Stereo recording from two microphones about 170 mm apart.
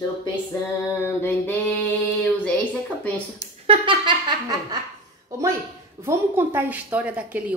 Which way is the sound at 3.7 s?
30° right (ahead or behind).